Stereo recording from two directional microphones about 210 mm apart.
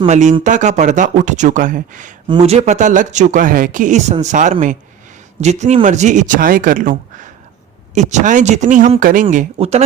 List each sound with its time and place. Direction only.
0.0 s speech: 35° right (ahead or behind)
2.2 s speech: 25° right (ahead or behind)
7.9 s speech: 35° right (ahead or behind)